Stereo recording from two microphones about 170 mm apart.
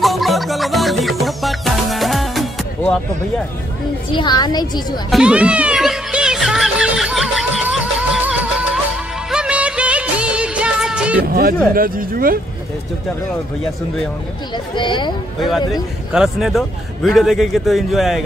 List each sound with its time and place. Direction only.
0.0 s music: centre (ahead or behind)
4.1 s a woman's voice: 25° left (ahead or behind)
5.1 s music: 5° right (ahead or behind)
9.3 s music of bollywood: 5° right (ahead or behind)
11.7 s speech: 55° right (ahead or behind)
14.8 s a woman's voice: 30° left (ahead or behind)
15.7 s a man's voice: 5° right (ahead or behind)